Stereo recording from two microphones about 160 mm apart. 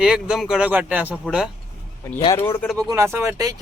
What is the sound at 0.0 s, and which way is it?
Speech, 5° right (ahead or behind).